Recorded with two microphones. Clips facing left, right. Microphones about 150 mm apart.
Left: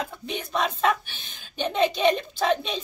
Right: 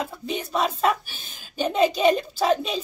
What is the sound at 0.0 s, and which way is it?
Speech, 5° right (ahead or behind).